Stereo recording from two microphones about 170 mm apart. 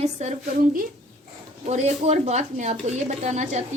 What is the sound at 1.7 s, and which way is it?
Speech, 40° right (ahead or behind).